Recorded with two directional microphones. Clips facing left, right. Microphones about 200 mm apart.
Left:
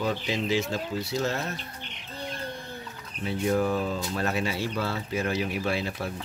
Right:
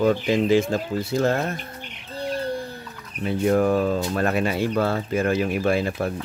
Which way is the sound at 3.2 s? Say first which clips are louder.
Right 6 dB; 55° right (ahead or behind).